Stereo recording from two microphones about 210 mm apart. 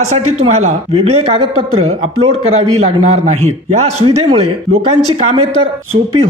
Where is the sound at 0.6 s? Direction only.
30° right (ahead or behind).